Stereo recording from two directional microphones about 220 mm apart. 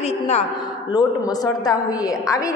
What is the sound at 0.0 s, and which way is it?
Speech, 30° left (ahead or behind).